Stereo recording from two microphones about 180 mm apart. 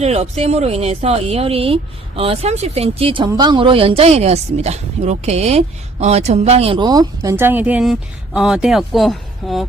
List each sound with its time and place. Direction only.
0.0 s speech: 35° right (ahead or behind); by 9.6 s centre (ahead or behind)